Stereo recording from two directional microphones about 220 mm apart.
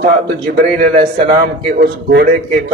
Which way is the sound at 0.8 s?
25° right (ahead or behind).